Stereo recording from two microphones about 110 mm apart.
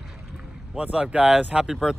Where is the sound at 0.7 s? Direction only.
10° right (ahead or behind).